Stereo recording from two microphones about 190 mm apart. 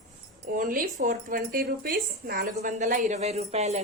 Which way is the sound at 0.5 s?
45° right (ahead or behind).